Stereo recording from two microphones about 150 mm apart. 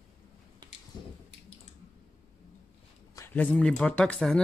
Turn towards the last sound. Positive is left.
turn(degrees=5)  # may be behind; listen again after turning